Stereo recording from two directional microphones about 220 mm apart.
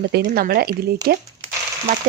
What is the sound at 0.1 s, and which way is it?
A woman's voice, 45° right (ahead or behind).